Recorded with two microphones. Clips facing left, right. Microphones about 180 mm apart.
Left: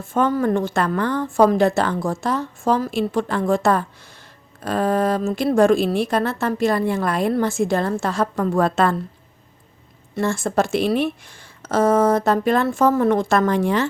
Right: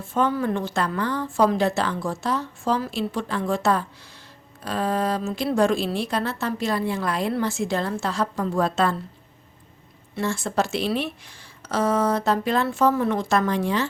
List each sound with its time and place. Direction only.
0.0 s a woman's voice: 50° left (ahead or behind)
10.2 s speech: 50° left (ahead or behind)